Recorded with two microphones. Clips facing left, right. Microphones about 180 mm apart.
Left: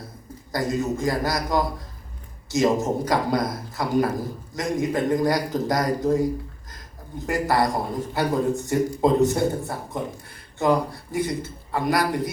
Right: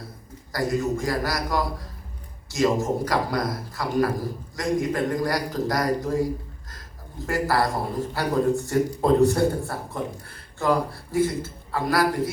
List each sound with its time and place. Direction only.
0.5 s a man's voice: 20° left (ahead or behind)
7.3 s a man's voice: 20° left (ahead or behind)